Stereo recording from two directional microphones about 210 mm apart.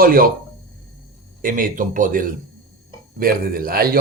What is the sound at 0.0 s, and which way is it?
Speech, 45° right (ahead or behind).